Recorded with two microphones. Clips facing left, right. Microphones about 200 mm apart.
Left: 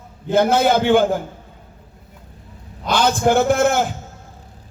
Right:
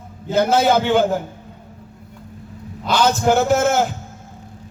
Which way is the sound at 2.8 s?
50° left (ahead or behind).